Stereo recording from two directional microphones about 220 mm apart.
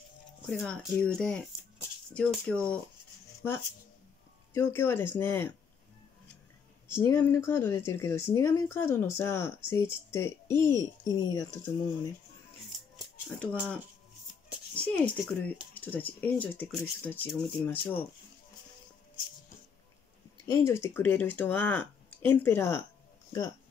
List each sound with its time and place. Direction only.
0.5 s speech: 5° left (ahead or behind)
6.9 s speech: 10° left (ahead or behind)
13.3 s speech: 5° left (ahead or behind)
14.8 s speech: 5° left (ahead or behind)
20.5 s speech: 10° left (ahead or behind)